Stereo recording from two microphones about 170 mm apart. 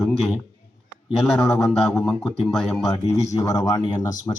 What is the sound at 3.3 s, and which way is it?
Speech, 20° left (ahead or behind).